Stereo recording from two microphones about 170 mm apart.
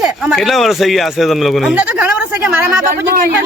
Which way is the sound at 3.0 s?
60° right (ahead or behind).